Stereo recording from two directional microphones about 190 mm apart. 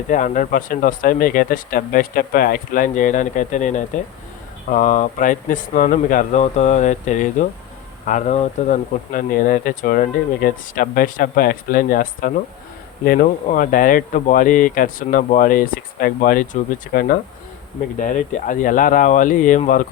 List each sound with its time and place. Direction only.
0.1 s speech: 40° left (ahead or behind)